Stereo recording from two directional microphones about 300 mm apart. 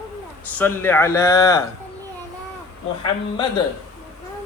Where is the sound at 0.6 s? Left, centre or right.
Centre.